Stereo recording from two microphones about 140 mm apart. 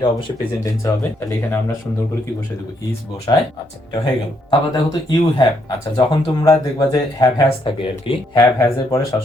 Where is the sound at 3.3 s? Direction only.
25° left (ahead or behind).